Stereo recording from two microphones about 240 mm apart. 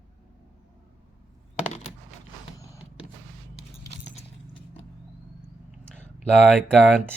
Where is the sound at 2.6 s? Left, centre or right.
Centre.